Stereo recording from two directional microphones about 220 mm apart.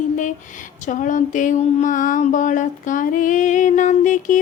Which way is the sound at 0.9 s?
35° left (ahead or behind).